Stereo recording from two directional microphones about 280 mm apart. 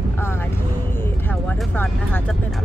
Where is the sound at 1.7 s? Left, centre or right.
Centre.